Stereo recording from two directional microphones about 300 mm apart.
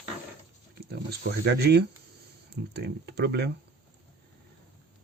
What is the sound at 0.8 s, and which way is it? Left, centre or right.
Speech, right.